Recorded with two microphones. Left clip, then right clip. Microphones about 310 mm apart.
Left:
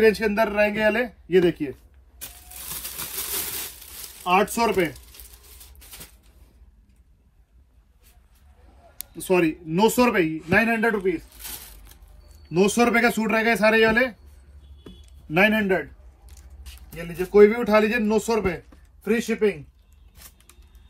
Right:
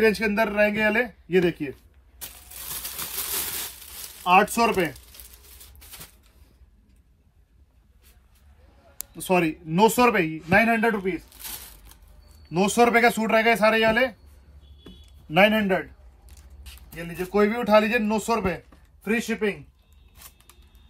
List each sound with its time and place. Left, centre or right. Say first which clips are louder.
0.0 s a sound: left 2 dB; centre
9.2 s a man's voice: left 1 dB; centre
10.5 s zipper: right 1 dB; centre
12.7 s a man's voice: right 6 dB; centre
15.3 s a sound: even; centre
16.6 s a man's voice: left 1 dB; centre
20.2 s vehicle: even; centre